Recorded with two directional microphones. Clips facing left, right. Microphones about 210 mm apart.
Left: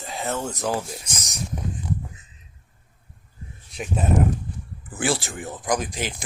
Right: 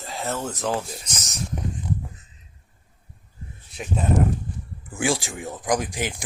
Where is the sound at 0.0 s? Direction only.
Centre (ahead or behind).